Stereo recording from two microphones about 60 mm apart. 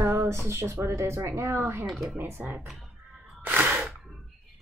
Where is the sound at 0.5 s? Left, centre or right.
Right.